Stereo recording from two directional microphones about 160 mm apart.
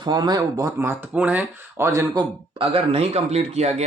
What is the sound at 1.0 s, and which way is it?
Speech, 10° right (ahead or behind).